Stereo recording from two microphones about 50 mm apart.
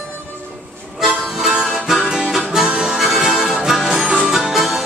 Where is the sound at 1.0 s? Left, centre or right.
Centre.